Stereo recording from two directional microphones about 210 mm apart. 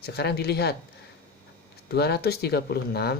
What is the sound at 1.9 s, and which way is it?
Speech, 50° left (ahead or behind).